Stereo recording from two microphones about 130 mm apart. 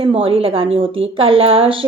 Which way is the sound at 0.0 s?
45° right (ahead or behind).